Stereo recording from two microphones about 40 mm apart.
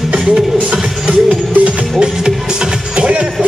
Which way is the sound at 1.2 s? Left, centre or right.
Right.